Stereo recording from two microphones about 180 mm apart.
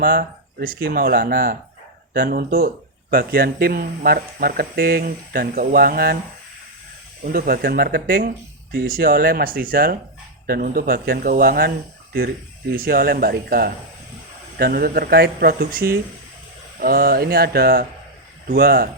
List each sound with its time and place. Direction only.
0.0 s speech: 55° right (ahead or behind)
7.3 s speech: 55° right (ahead or behind)
12.7 s speech: 55° right (ahead or behind)